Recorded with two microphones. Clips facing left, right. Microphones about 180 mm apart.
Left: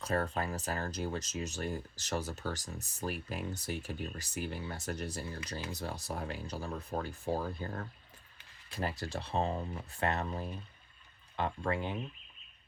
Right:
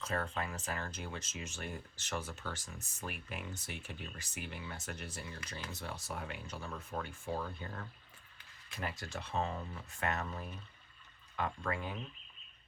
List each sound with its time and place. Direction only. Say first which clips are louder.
0.0 s speech: left 5 dB; 35° left (ahead or behind)